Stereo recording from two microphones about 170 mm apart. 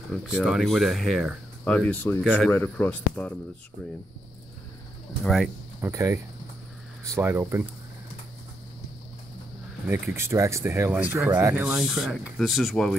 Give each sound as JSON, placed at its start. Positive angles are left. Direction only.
{"t": 0.1, "sound": "speech", "side_deg": -5}
{"t": 2.2, "sound": "speech", "side_deg": -5}
{"t": 2.5, "sound": "speech", "side_deg": 10}
{"t": 5.2, "sound": "speech", "side_deg": 0}
{"t": 5.9, "sound": "speech", "side_deg": -15}
{"t": 9.8, "sound": "speech", "side_deg": -10}